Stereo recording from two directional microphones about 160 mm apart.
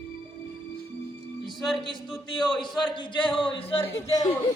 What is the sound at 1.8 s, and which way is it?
Speech, 30° left (ahead or behind).